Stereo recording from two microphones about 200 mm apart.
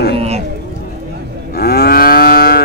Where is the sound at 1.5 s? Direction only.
50° left (ahead or behind).